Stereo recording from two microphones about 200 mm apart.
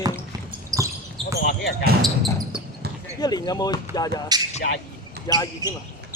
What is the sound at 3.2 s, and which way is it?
Speech, 20° left (ahead or behind).